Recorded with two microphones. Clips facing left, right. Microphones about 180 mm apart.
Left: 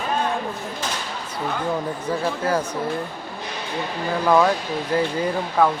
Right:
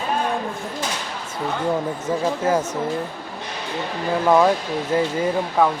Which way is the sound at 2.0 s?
20° right (ahead or behind).